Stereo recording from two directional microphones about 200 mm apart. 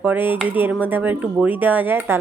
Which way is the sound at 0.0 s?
10° right (ahead or behind).